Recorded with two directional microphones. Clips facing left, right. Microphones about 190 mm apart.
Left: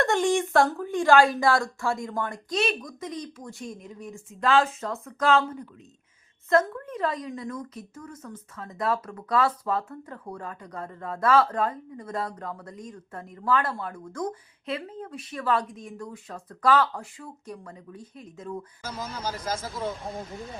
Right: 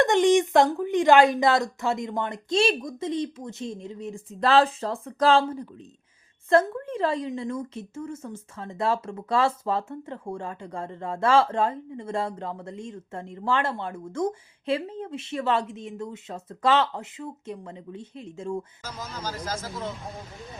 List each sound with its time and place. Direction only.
0.0 s a woman's voice: 20° right (ahead or behind)
18.8 s speech: 10° left (ahead or behind)